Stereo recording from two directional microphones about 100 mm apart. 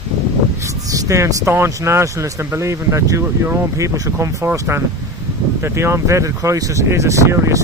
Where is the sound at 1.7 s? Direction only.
30° right (ahead or behind).